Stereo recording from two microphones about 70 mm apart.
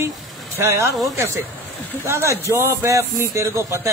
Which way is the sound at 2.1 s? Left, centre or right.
Right.